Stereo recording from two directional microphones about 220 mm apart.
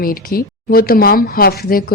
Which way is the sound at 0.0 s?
40° left (ahead or behind).